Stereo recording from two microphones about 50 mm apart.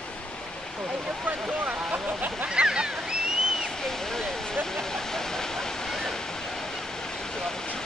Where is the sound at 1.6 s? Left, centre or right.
Right.